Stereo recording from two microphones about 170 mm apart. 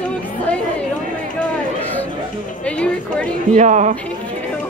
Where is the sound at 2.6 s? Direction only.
5° left (ahead or behind).